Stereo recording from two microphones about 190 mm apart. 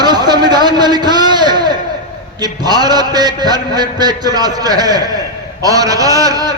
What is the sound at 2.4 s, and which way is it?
A man's voice, 20° right (ahead or behind).